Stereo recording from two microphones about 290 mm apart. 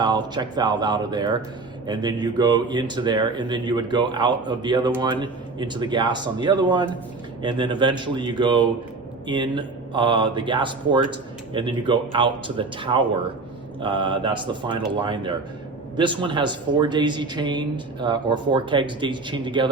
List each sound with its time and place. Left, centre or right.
0.0 s speech: centre